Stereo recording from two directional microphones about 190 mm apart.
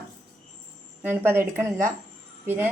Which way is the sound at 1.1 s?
10° right (ahead or behind).